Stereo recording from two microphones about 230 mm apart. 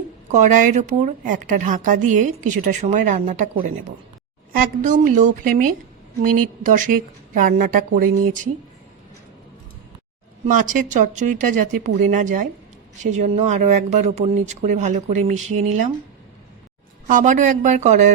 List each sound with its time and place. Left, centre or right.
0.3 s a woman's voice: right
10.4 s a woman's voice: right
17.1 s a woman's voice: right